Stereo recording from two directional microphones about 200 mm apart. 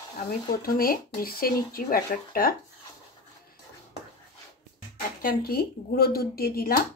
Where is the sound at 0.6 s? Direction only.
45° left (ahead or behind).